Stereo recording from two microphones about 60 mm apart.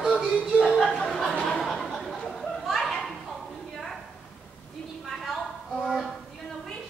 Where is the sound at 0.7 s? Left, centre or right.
Centre.